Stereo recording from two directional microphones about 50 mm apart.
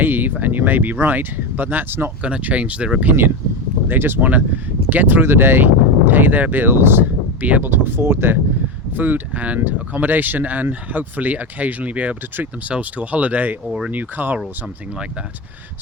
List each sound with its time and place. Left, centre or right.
0.0 s speech: right
2.4 s speech: right
3.1 s speech: right
9.0 s speech: right
13.7 s speech: centre
13.9 s speech: right